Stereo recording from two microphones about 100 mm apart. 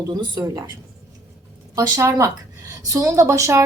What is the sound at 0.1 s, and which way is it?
Speech, 45° right (ahead or behind).